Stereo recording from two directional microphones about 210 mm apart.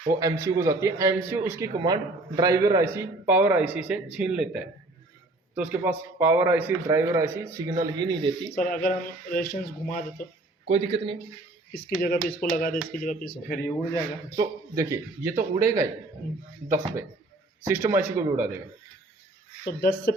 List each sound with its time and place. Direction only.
0.1 s a man's voice: 15° right (ahead or behind)
5.5 s a man's voice: 10° right (ahead or behind)
8.5 s speech: 45° left (ahead or behind)
10.7 s speech: 30° right (ahead or behind)
11.9 s speech: 45° left (ahead or behind)
14.3 s a man's voice: 15° right (ahead or behind)
19.6 s speech: 50° left (ahead or behind)